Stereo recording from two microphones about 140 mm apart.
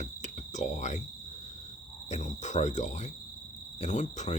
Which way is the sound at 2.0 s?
55° left (ahead or behind).